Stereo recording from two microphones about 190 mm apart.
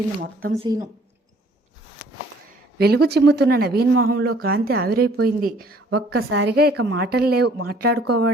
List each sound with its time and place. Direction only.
0.6 s speech: 20° right (ahead or behind)
2.7 s speech: 55° right (ahead or behind)
6.1 s speech: 80° right; by 8.3 s 55° right (ahead or behind)